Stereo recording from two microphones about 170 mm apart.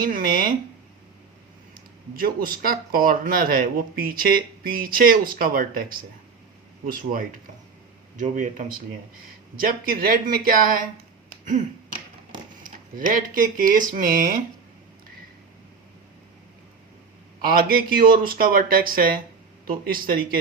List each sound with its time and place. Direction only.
0.0 s speech: 60° right (ahead or behind)
1.7 s speech: 55° right (ahead or behind)
12.6 s speech: 55° right (ahead or behind)
17.4 s speech: 60° right (ahead or behind)